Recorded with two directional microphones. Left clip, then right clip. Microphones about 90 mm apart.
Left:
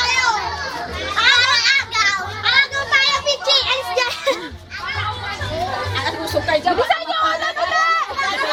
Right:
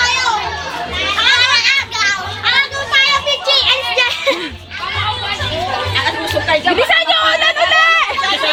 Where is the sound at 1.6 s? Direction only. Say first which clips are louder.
Right 2 dB; 20° left (ahead or behind).